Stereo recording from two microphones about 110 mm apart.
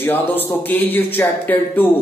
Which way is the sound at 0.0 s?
15° left (ahead or behind).